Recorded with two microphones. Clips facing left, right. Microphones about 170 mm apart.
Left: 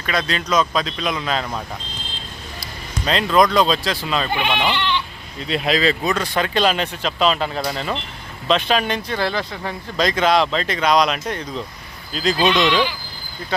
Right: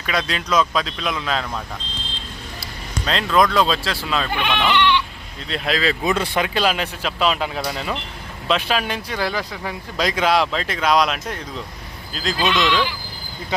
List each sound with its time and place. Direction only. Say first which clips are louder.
0.0 s speech: left 1 dB; 5° right (ahead or behind)
3.1 s speech: left 2 dB; 5° left (ahead or behind)
6.1 s speech: even; 25° right (ahead or behind)
6.4 s speech: left 2 dB; 5° right (ahead or behind)
12.4 s speech: left 2 dB; 20° left (ahead or behind)